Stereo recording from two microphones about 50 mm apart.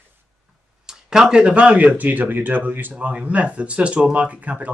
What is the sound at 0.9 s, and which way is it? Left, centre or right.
Speech, centre.